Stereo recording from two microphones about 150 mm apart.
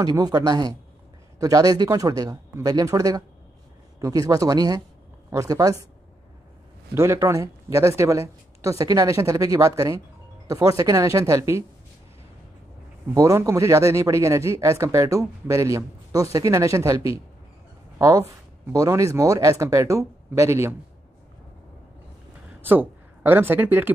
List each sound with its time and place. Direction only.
0.0 s speech: 25° right (ahead or behind)
6.9 s speech: 20° right (ahead or behind)
13.1 s speech: 20° right (ahead or behind)
22.6 s speech: 15° right (ahead or behind)